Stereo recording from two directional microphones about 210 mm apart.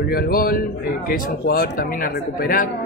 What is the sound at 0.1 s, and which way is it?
A woman's voice, 45° left (ahead or behind).